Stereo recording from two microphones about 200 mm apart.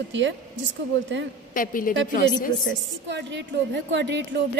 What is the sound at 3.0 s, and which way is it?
A woman's voice, 60° right (ahead or behind).